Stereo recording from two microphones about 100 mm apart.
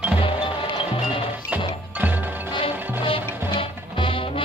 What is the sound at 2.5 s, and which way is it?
Music, 65° left (ahead or behind).